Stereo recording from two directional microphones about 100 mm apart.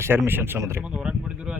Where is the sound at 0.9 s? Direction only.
10° right (ahead or behind).